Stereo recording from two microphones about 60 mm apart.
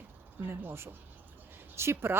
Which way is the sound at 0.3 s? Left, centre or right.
Right.